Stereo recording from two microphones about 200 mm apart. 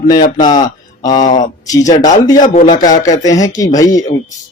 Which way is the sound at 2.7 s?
20° left (ahead or behind).